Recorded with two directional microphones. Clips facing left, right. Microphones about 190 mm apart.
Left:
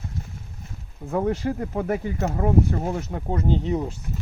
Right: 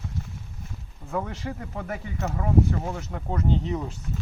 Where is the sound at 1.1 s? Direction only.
35° left (ahead or behind).